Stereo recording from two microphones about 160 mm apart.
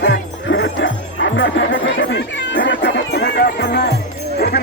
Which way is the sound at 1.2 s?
90° left.